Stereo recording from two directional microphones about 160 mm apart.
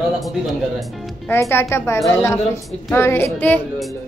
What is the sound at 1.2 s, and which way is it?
Speech, 15° left (ahead or behind).